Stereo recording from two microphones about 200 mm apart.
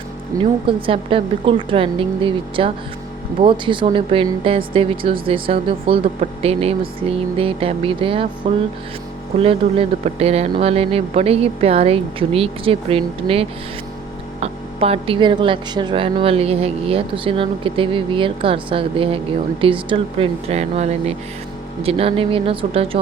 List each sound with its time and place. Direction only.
0.3 s speech: 15° right (ahead or behind)